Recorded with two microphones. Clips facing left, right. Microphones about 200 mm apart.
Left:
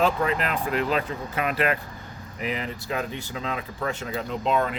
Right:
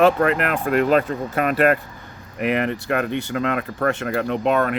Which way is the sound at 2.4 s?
65° right (ahead or behind).